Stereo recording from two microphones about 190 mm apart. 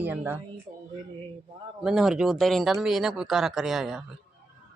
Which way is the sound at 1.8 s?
5° right (ahead or behind).